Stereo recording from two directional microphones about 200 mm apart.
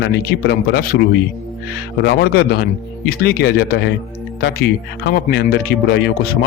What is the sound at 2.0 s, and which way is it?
Speech, 50° left (ahead or behind).